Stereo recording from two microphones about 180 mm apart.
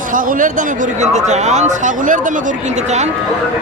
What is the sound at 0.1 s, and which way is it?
A man's voice, 50° right (ahead or behind).